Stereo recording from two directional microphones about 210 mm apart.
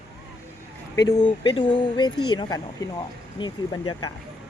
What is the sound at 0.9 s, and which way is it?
Speech, 20° left (ahead or behind).